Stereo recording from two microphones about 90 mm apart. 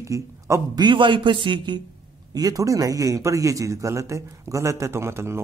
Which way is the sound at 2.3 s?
45° right (ahead or behind).